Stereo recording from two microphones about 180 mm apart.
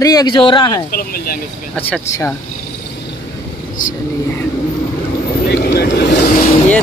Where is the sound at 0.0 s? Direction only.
20° left (ahead or behind).